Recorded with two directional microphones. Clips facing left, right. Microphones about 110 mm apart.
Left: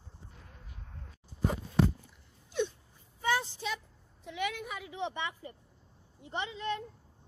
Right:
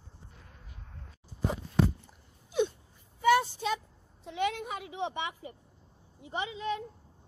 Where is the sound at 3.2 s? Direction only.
60° right (ahead or behind).